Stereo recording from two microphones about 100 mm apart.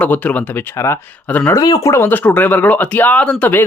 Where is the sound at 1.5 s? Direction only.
40° left (ahead or behind).